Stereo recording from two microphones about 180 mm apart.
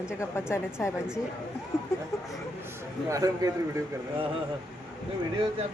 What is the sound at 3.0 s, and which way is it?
Speech, 20° right (ahead or behind).